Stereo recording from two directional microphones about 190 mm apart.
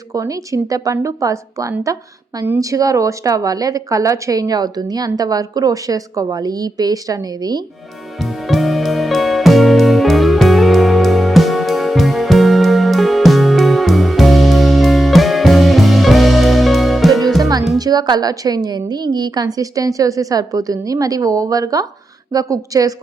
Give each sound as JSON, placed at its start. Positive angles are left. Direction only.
{"t": 0.1, "sound": "a woman's voice", "side_deg": -15}
{"t": 8.2, "sound": "music", "side_deg": 0}
{"t": 17.7, "sound": "a woman's voice", "side_deg": -20}